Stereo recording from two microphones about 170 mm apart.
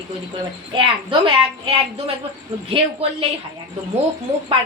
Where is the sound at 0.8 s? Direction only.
30° right (ahead or behind).